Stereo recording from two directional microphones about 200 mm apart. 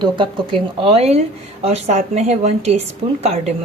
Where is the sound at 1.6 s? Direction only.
30° right (ahead or behind).